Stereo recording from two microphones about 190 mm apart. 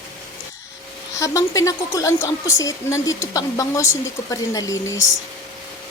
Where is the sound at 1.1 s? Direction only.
15° left (ahead or behind).